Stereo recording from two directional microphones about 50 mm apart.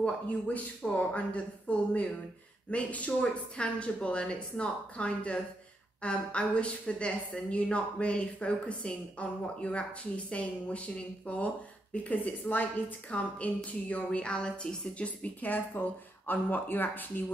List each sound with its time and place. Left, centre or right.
0.0 s a woman's voice: left
15.0 s speech: left